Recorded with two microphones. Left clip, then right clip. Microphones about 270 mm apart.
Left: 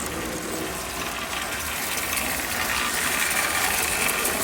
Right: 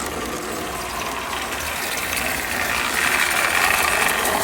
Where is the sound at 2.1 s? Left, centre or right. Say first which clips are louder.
Right 4 dB; right.